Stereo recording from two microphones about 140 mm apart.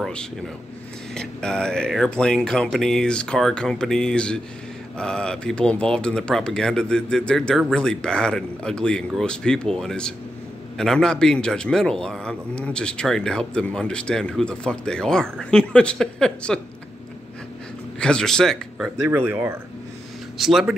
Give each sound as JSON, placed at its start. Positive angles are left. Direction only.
{"t": 0.0, "sound": "a man's voice", "side_deg": 5}
{"t": 17.9, "sound": "speech", "side_deg": 5}
{"t": 19.0, "sound": "speech", "side_deg": -15}
{"t": 20.3, "sound": "a man's voice", "side_deg": 0}